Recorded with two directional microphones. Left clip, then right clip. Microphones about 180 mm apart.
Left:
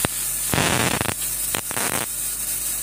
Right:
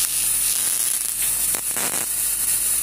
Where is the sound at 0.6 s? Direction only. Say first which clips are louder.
Left 8 dB; 20° left (ahead or behind).